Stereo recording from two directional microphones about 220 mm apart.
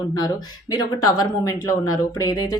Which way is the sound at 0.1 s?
20° left (ahead or behind).